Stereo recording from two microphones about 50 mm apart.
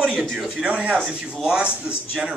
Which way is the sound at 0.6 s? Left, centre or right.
Right.